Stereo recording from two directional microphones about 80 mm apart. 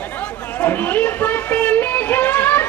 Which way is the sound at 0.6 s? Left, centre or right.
Left.